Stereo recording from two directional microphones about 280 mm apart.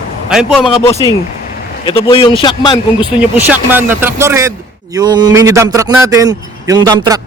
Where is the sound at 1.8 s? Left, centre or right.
Centre.